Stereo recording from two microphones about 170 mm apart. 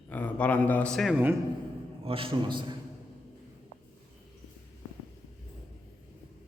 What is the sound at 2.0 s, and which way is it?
Speech, 30° right (ahead or behind).